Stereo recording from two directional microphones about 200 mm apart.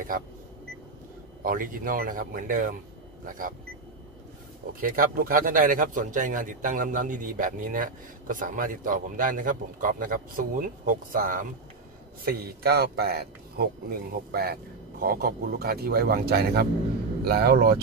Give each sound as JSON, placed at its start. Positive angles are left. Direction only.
{"t": 1.4, "sound": "a man's voice", "side_deg": -45}
{"t": 4.7, "sound": "a man's voice", "side_deg": -45}